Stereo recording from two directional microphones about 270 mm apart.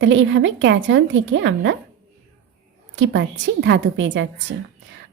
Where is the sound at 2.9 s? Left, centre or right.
Right.